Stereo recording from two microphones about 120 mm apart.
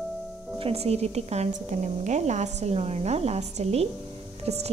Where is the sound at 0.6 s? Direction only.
60° right (ahead or behind).